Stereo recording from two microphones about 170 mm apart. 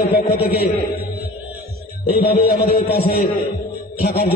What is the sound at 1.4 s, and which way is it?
Music, 65° left (ahead or behind).